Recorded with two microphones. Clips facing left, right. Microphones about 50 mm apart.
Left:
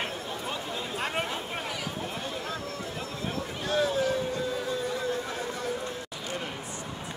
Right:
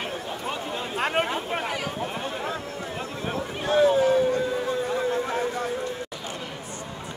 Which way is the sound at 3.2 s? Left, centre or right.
Right.